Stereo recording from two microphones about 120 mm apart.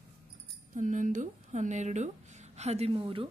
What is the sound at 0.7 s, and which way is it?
Speech, 90° right.